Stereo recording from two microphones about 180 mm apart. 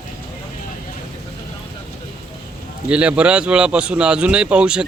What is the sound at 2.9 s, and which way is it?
Speech, 5° right (ahead or behind).